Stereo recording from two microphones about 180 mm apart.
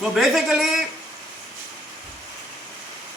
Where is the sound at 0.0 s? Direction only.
Centre (ahead or behind).